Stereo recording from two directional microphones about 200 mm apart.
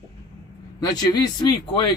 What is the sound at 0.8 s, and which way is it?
Speech, 20° left (ahead or behind).